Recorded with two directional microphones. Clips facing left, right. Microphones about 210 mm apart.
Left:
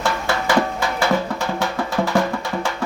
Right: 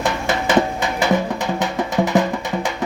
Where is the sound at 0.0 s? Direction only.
20° right (ahead or behind).